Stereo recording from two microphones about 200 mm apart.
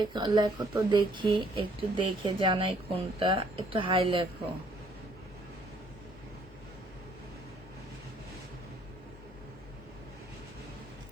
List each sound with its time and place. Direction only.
0.0 s speech: 20° right (ahead or behind)